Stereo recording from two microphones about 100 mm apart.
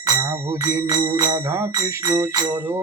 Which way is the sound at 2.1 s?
40° right (ahead or behind).